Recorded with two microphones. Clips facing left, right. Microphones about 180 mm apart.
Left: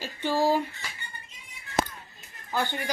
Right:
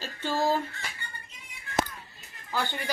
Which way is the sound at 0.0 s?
15° left (ahead or behind).